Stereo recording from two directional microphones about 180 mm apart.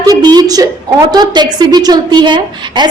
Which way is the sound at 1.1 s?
25° right (ahead or behind).